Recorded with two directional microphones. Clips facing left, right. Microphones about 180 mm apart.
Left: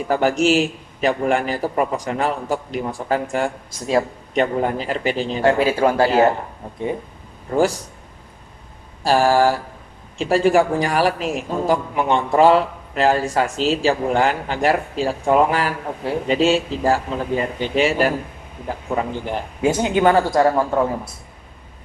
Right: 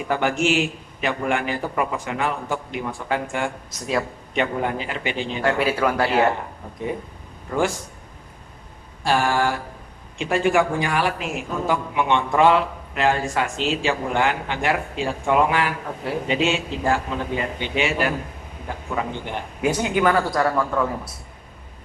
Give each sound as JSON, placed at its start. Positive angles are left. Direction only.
{"t": 0.1, "sound": "a man's voice", "side_deg": 40}
{"t": 7.5, "sound": "a man's voice", "side_deg": 35}
{"t": 9.0, "sound": "a man's voice", "side_deg": 35}
{"t": 19.8, "sound": "a woman's voice", "side_deg": 25}